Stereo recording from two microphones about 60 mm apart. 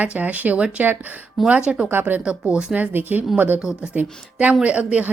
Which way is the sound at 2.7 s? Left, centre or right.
Right.